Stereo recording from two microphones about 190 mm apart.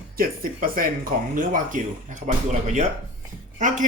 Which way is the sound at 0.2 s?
50° right (ahead or behind).